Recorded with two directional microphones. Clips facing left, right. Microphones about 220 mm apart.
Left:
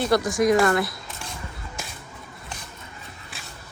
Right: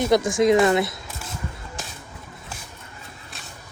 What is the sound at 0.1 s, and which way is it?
Speech, 20° right (ahead or behind).